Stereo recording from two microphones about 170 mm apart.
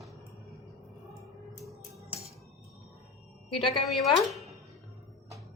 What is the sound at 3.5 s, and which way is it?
Speech, 30° left (ahead or behind).